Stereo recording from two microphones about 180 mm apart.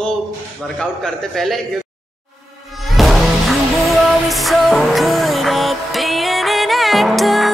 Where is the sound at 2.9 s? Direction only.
Centre (ahead or behind).